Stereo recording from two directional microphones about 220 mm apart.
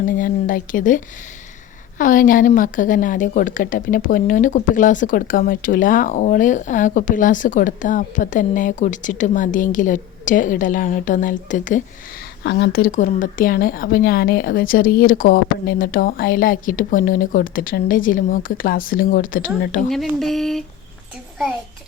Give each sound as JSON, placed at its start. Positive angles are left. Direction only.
{"t": 0.0, "sound": "a woman's voice", "side_deg": 40}
{"t": 12.4, "sound": "a woman's voice", "side_deg": 50}
{"t": 19.9, "sound": "speech", "side_deg": 0}